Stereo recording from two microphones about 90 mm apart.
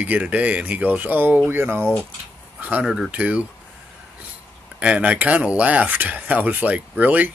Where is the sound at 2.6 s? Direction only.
15° right (ahead or behind).